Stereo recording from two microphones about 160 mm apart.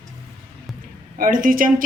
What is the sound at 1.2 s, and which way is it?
Speech, 60° right (ahead or behind).